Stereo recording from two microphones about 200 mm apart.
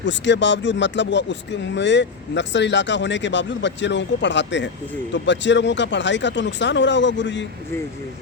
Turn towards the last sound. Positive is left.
turn(degrees=15)  # may be behind; listen again after turning